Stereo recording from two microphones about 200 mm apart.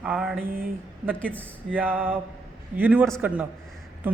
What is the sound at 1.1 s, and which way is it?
Speech, 5° left (ahead or behind).